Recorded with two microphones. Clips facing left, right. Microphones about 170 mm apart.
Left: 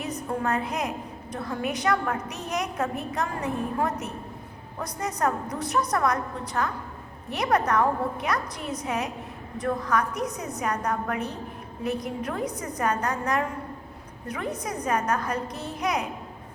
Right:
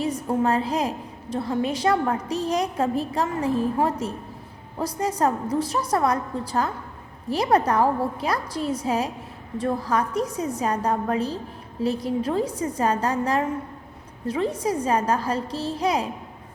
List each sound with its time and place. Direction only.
0.3 s a woman's voice: 30° right (ahead or behind)